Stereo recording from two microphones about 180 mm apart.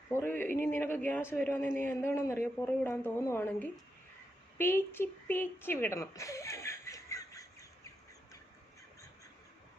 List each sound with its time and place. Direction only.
0.1 s a man's voice: 15° left (ahead or behind)